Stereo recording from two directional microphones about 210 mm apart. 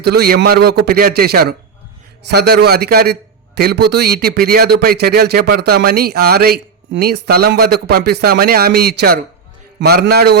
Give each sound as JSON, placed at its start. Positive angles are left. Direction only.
{"t": 0.0, "sound": "a man's voice", "side_deg": -50}